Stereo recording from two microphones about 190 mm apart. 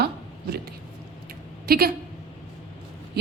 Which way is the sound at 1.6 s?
55° right (ahead or behind).